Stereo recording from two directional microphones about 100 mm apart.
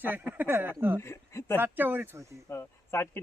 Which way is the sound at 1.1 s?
25° left (ahead or behind).